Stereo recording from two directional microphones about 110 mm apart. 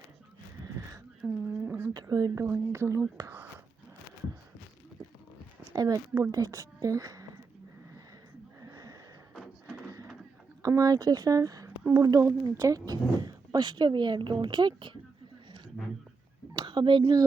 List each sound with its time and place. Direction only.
1.2 s speech: 5° right (ahead or behind)
1.6 s a sound: 20° right (ahead or behind)
1.9 s speech: 35° right (ahead or behind)
2.4 s speech: 20° right (ahead or behind)
5.7 s a woman's voice: 35° right (ahead or behind)
8.6 s wheeze: 35° right (ahead or behind)
9.7 s a sound: 30° right (ahead or behind)
10.6 s speech: 35° right (ahead or behind)
16.6 s a sound: 45° right (ahead or behind)